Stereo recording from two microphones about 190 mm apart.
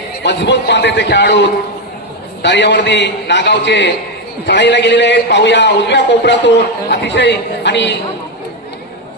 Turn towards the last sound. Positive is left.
turn(degrees=65)  # may be behind; listen again after turning